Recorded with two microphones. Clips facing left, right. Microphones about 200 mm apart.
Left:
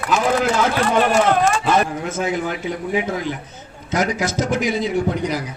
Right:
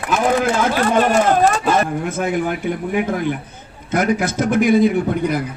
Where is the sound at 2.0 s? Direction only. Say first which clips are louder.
Right 2 dB; 55° right (ahead or behind).